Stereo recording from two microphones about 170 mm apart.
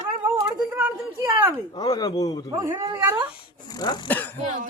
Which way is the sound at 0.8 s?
10° right (ahead or behind).